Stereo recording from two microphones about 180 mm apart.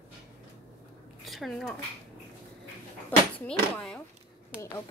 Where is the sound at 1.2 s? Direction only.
Centre (ahead or behind).